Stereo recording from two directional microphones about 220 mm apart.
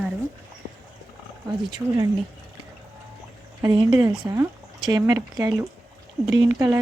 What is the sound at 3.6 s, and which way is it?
Speech, 15° right (ahead or behind).